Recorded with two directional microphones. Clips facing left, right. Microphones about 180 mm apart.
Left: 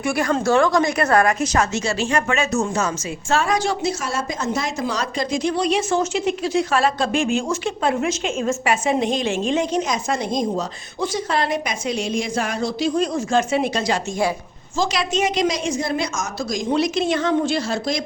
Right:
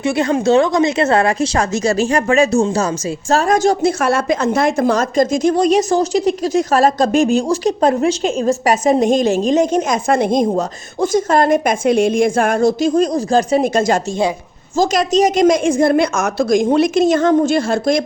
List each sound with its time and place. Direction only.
0.0 s speech: 25° right (ahead or behind); by 3.9 s 45° right (ahead or behind)
4.0 s a woman's voice: 60° right (ahead or behind)